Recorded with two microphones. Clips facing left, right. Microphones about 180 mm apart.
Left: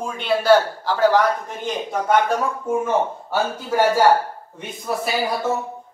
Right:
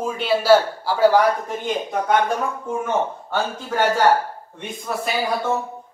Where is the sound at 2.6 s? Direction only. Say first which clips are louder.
Left 3 dB; 5° left (ahead or behind).